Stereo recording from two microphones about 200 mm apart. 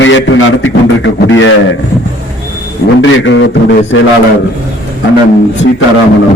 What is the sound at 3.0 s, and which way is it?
A man's voice, 65° left (ahead or behind).